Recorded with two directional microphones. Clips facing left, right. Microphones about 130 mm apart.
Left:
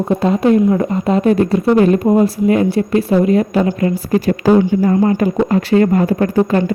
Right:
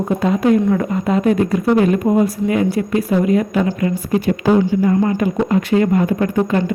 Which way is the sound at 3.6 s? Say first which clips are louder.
Left 3 dB; 40° left (ahead or behind).